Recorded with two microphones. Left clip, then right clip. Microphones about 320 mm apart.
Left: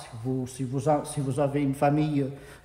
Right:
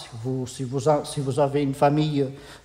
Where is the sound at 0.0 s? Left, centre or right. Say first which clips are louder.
Right 2 dB; right.